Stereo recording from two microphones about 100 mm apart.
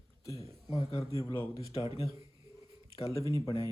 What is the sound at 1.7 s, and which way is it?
Speech, 80° left.